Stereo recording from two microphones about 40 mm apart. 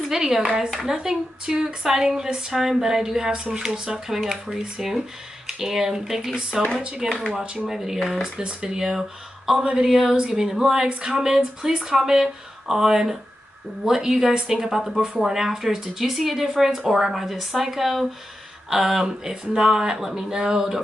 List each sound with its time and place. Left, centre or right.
0.1 s speech: centre
8.4 s speech: right